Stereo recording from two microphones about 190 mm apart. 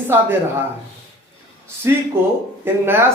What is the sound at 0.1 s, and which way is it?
Speech, 10° right (ahead or behind).